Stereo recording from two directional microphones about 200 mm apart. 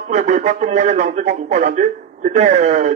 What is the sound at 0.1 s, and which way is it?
A man's voice, 35° right (ahead or behind).